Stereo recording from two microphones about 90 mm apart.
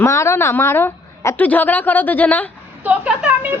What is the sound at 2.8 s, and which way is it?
Speech, 15° right (ahead or behind).